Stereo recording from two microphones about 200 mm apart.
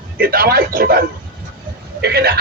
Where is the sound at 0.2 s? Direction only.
50° right (ahead or behind).